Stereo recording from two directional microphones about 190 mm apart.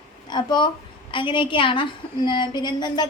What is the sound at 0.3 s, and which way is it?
A woman's voice, 25° left (ahead or behind).